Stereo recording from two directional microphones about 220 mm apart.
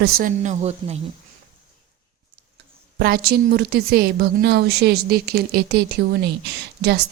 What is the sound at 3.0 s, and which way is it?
A woman's voice, 45° right (ahead or behind).